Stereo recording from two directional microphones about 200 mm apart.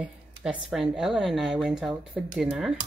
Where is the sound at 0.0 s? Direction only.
5° right (ahead or behind).